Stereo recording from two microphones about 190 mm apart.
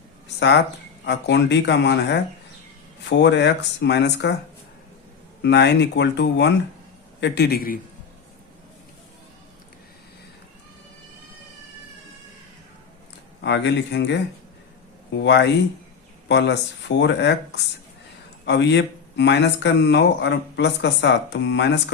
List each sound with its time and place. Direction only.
0.3 s speech: 65° left (ahead or behind)
5.4 s speech: 65° left (ahead or behind)
13.4 s speech: 70° left (ahead or behind)